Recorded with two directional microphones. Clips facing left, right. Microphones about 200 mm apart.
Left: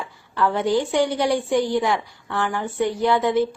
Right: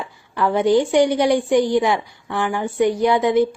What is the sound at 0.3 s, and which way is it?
A woman's voice, 15° right (ahead or behind).